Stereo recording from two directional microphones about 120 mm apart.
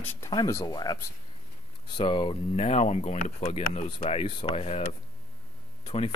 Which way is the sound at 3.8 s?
45° left (ahead or behind).